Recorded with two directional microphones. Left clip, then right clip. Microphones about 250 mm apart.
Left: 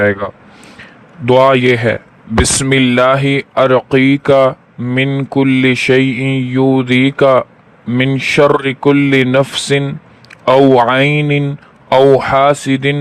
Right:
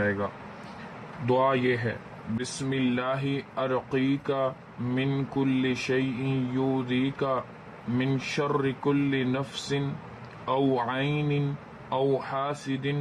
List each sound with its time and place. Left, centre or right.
0.0 s speech: left
1.3 s speech: left